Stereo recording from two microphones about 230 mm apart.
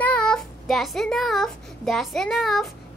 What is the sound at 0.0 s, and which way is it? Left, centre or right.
A child's voice, centre.